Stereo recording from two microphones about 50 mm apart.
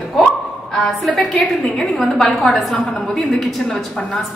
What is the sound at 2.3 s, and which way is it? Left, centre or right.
A woman's voice, centre.